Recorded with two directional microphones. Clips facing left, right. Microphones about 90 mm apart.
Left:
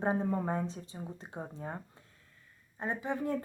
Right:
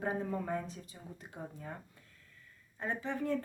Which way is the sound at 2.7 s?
20° left (ahead or behind).